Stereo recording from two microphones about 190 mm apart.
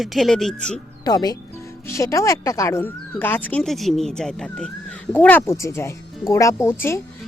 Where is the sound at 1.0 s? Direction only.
20° left (ahead or behind).